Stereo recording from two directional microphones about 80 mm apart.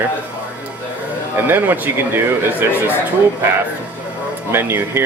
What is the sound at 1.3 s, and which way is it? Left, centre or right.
Speech, right.